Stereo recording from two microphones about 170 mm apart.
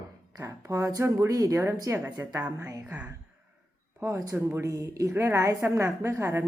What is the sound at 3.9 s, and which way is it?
Speech, 15° right (ahead or behind).